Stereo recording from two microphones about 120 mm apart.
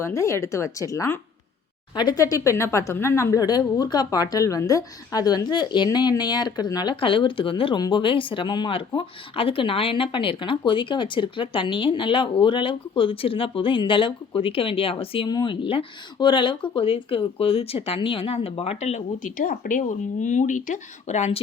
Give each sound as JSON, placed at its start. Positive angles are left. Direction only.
{"t": 0.0, "sound": "a woman's voice", "side_deg": 25}
{"t": 15.3, "sound": "a woman's voice", "side_deg": 40}